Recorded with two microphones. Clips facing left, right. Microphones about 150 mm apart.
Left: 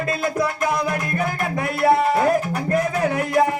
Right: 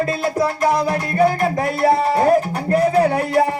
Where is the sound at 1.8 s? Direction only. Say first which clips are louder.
Right 1 dB; 35° right (ahead or behind).